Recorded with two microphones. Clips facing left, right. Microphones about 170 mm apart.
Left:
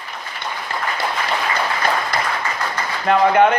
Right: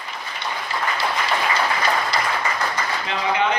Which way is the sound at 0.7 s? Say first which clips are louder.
Left 1 dB; 50° left (ahead or behind).